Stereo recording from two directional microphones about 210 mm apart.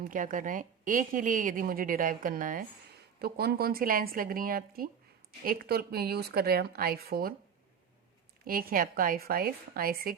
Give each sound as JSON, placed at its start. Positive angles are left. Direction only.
{"t": 0.0, "sound": "a woman's voice", "side_deg": -40}
{"t": 8.4, "sound": "speech", "side_deg": -45}